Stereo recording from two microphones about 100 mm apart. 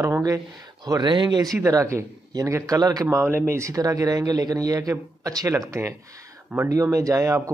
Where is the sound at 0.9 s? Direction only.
45° right (ahead or behind).